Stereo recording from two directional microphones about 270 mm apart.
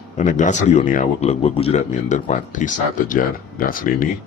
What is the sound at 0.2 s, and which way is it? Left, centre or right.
A man's voice, left.